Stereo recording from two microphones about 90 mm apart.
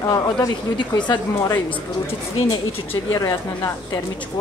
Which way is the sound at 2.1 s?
90° left.